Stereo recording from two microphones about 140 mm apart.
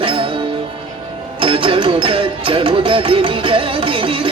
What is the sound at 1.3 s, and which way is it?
Music, 40° right (ahead or behind).